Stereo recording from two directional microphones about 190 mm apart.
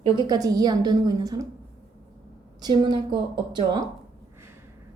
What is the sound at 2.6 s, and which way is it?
A woman's voice, 20° right (ahead or behind).